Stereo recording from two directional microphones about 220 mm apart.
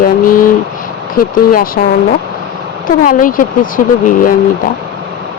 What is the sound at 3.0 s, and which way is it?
Speech, 40° left (ahead or behind).